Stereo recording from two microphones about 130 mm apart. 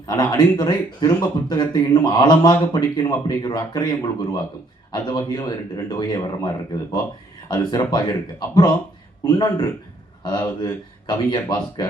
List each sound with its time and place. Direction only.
0.1 s speech: 30° left (ahead or behind)